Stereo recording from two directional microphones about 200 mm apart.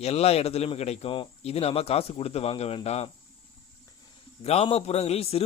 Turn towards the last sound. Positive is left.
turn(degrees=30)  # may be behind; listen again after turning